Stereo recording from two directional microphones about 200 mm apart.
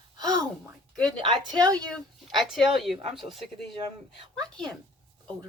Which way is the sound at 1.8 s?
Centre (ahead or behind).